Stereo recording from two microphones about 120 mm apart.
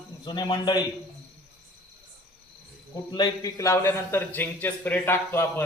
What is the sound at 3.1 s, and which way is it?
Speech, 30° left (ahead or behind).